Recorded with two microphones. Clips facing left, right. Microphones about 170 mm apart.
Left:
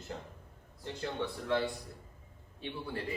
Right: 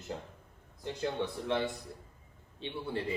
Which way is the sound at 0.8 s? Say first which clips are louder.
Right 3 dB; 20° right (ahead or behind).